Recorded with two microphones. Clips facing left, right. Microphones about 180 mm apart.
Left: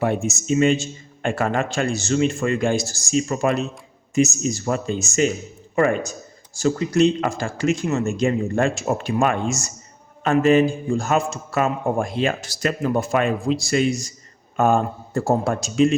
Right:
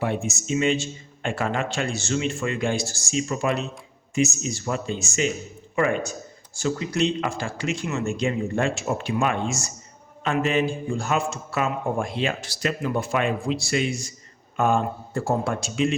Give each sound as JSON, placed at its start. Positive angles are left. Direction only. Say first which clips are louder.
{"t": 0.0, "sound": "a man's voice", "louder": "left 4 dB", "side_deg": 45}